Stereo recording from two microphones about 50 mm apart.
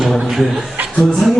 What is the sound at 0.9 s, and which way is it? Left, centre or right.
Speech, centre.